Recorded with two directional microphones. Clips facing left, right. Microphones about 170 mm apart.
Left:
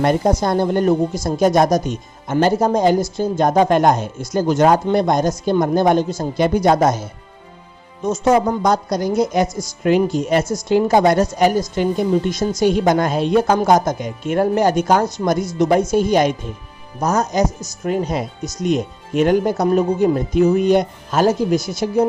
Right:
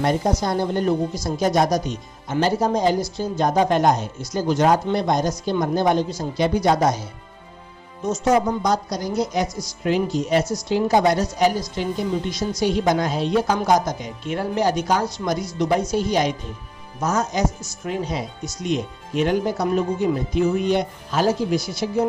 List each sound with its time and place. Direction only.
0.0 s speech: 55° left (ahead or behind)
8.1 s speech: 55° left (ahead or behind)
17.0 s speech: 40° left (ahead or behind)